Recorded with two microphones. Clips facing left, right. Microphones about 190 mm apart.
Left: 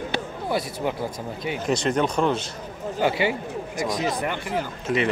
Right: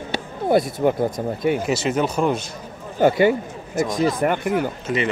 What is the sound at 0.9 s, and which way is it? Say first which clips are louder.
Speech: right 8 dB; 50° right (ahead or behind).